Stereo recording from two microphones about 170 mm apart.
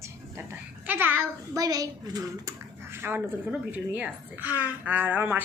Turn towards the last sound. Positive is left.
turn(degrees=-10)  # may be behind; listen again after turning